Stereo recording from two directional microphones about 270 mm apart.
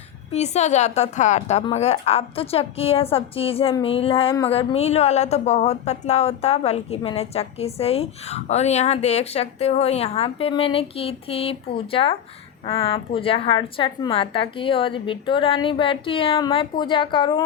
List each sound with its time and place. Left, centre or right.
0.3 s a woman's voice: left